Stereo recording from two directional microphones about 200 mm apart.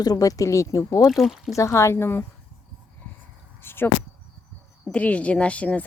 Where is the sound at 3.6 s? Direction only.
10° left (ahead or behind).